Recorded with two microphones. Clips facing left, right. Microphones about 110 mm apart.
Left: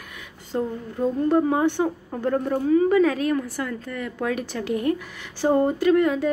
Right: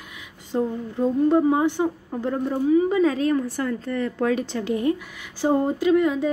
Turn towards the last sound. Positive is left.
turn(degrees=-10)  # may be behind; listen again after turning